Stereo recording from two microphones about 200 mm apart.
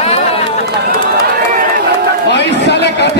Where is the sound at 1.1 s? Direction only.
40° right (ahead or behind).